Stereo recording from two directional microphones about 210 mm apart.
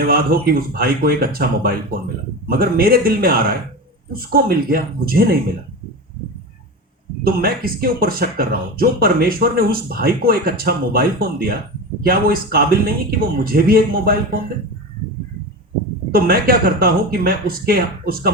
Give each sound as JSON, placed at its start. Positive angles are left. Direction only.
{"t": 0.0, "sound": "speech", "side_deg": -45}
{"t": 7.3, "sound": "speech", "side_deg": -45}
{"t": 16.1, "sound": "speech", "side_deg": -45}